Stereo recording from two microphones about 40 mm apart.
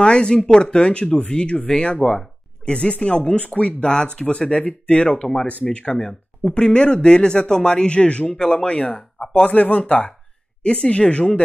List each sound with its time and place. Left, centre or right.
0.0 s speech: left